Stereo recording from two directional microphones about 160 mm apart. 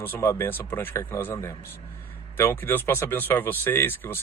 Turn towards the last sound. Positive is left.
turn(degrees=15)  # may be behind; listen again after turning